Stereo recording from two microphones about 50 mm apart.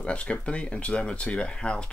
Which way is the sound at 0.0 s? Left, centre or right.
Left.